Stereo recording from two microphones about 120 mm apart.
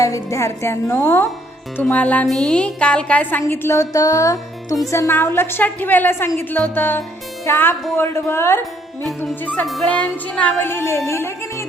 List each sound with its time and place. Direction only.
0.0 s music: 25° left (ahead or behind)
1.7 s a woman's voice: 10° left (ahead or behind); by 4.8 s 30° left (ahead or behind)
4.9 s music: 25° left (ahead or behind)
6.5 s a woman's voice: 15° left (ahead or behind)
7.9 s music: 20° left (ahead or behind)
9.6 s speech: centre (ahead or behind)
9.9 s music: 10° left (ahead or behind)